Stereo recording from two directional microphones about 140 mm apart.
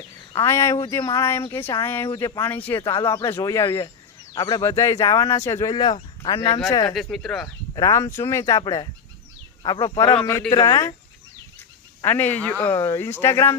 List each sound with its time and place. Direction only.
0.4 s speech: 20° left (ahead or behind)
6.9 s speech: centre (ahead or behind)
7.8 s speech: 20° left (ahead or behind)
12.0 s speech: 15° left (ahead or behind)